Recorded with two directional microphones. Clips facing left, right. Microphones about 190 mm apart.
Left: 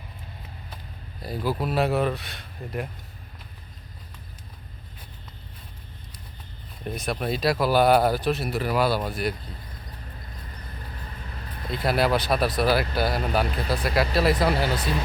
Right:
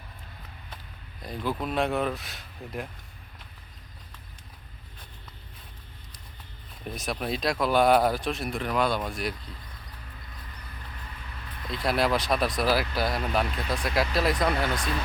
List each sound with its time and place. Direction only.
1.2 s speech: 5° left (ahead or behind)
6.8 s speech: centre (ahead or behind)
11.7 s speech: centre (ahead or behind)
14.5 s speech: 30° left (ahead or behind)